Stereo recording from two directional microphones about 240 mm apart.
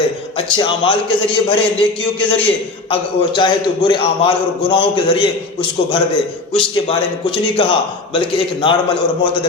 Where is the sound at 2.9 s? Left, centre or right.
Centre.